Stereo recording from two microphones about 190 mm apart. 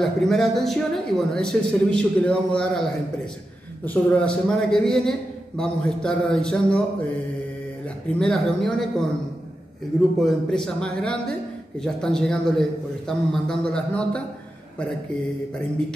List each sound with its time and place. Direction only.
0.0 s speech: centre (ahead or behind)
3.8 s speech: 10° left (ahead or behind)
8.1 s speech: 5° left (ahead or behind)
10.2 s speech: 5° left (ahead or behind)